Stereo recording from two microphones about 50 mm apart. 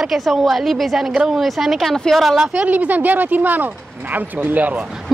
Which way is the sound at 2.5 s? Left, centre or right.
Right.